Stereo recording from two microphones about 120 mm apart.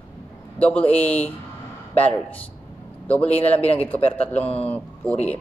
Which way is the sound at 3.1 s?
55° left (ahead or behind).